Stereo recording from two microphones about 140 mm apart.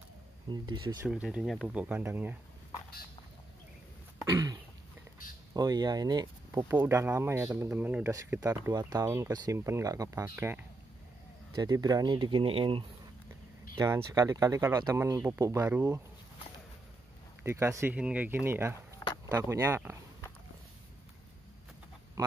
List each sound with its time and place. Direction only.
0.5 s speech: 30° right (ahead or behind)
1.0 s speech: 10° right (ahead or behind)
5.5 s speech: 25° right (ahead or behind)
6.7 s speech: 15° right (ahead or behind)
11.5 s speech: 30° right (ahead or behind)
13.7 s speech: 20° right (ahead or behind)
17.4 s speech: 20° right (ahead or behind)